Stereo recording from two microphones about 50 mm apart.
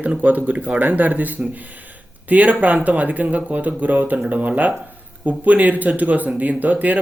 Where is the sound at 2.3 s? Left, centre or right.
Right.